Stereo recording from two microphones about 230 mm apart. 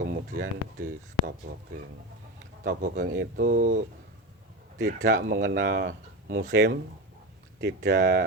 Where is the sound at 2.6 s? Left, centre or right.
Right.